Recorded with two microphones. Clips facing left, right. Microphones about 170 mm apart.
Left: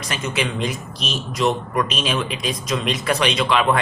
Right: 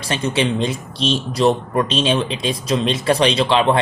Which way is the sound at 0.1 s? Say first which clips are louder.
Right 6 dB; 30° right (ahead or behind).